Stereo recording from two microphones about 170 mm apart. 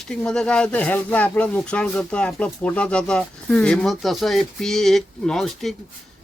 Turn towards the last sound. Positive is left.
turn(degrees=0)  # may be behind; listen again after turning